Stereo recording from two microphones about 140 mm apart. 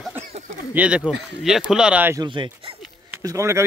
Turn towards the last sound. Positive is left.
turn(degrees=-20)  # may be behind; listen again after turning